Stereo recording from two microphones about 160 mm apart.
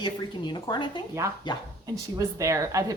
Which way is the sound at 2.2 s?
20° right (ahead or behind).